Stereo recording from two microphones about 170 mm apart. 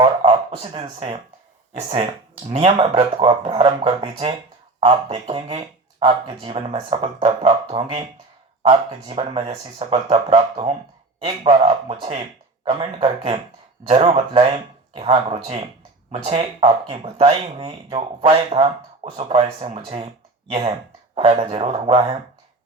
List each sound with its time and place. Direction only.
0.0 s a sound: 30° right (ahead or behind)
0.8 s speech: 30° right (ahead or behind)
21.2 s speech: 35° right (ahead or behind)